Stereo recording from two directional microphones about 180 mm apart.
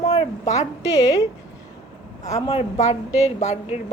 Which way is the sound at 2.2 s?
35° left (ahead or behind).